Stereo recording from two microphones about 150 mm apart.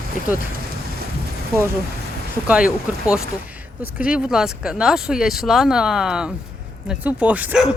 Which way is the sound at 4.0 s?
5° right (ahead or behind).